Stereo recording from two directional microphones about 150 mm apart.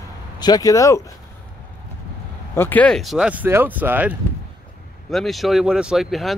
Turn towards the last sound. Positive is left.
turn(degrees=0)  # may be behind; listen again after turning